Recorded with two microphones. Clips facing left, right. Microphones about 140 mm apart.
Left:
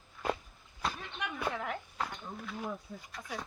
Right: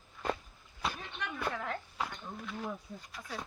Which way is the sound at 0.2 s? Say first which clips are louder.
Left 1 dB; 10° left (ahead or behind).